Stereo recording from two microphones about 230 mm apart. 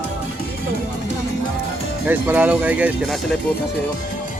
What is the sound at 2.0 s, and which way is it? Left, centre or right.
Speech, centre.